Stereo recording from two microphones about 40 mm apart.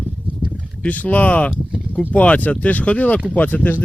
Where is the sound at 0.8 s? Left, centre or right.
Left.